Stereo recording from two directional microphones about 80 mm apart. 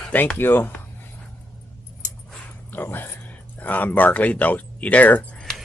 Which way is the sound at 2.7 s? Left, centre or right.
Left.